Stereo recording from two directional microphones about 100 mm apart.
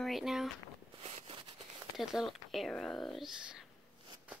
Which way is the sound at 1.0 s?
85° right.